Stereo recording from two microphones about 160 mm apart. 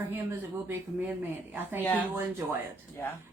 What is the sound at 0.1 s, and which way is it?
Speech, 15° right (ahead or behind).